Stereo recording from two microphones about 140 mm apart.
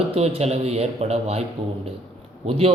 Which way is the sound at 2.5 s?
45° right (ahead or behind).